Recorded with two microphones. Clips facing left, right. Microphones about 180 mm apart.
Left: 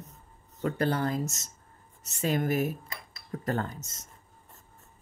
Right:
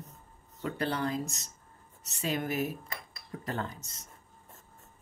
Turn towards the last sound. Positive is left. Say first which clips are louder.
# left 5 dB
turn(degrees=45)  # may be behind; listen again after turning